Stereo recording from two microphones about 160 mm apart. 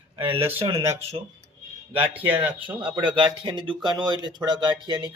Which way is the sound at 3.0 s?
30° right (ahead or behind).